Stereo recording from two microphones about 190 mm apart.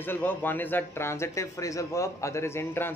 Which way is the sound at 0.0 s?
10° left (ahead or behind).